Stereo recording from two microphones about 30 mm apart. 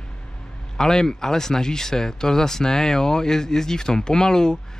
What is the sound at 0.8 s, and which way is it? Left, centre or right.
Speech, centre.